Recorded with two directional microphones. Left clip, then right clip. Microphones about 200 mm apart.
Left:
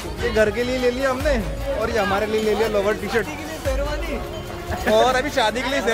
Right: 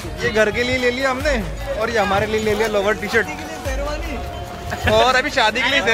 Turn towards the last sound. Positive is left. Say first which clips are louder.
# right 4 dB
turn(degrees=0)  # may be behind; listen again after turning